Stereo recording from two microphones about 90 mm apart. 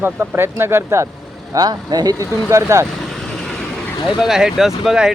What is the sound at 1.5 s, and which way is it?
Speech, 45° right (ahead or behind).